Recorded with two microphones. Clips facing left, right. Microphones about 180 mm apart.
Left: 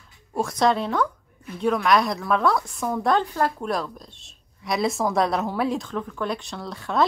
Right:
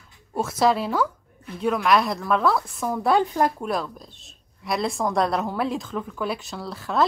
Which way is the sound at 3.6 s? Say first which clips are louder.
Even; centre (ahead or behind).